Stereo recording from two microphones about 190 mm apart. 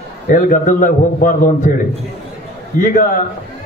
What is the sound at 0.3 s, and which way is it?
A man's voice, 45° left (ahead or behind).